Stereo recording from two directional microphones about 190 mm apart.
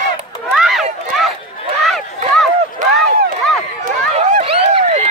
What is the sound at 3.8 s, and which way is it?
Run, 40° right (ahead or behind).